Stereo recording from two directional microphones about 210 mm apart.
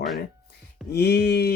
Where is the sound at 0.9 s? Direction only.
50° left (ahead or behind).